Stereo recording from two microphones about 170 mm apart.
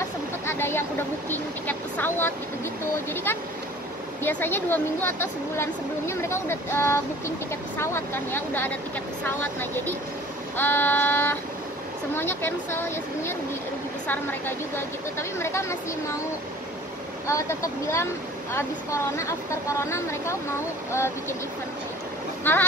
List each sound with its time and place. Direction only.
0.5 s speech: 15° left (ahead or behind)
4.2 s speech: 10° left (ahead or behind)
17.3 s speech: 20° left (ahead or behind)
22.4 s speech: 10° left (ahead or behind)